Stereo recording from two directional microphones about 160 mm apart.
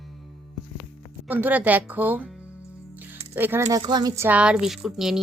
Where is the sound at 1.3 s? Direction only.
10° right (ahead or behind).